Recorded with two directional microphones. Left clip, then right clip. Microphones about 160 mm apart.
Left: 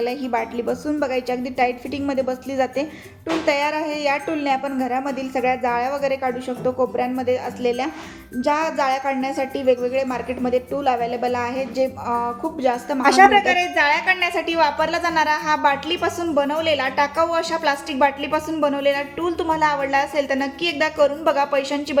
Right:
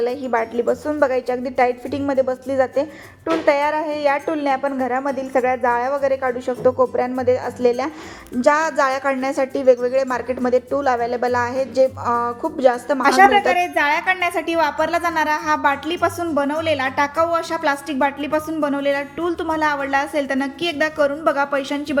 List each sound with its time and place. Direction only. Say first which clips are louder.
0.0 s a woman's voice: right 3 dB; 15° left (ahead or behind)
13.5 s a woman's voice: even; 10° right (ahead or behind)